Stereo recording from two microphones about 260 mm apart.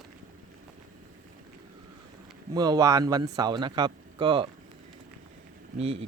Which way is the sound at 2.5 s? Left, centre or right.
Centre.